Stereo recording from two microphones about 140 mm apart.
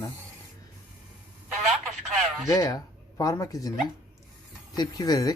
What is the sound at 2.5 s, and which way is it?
Speech, 25° left (ahead or behind).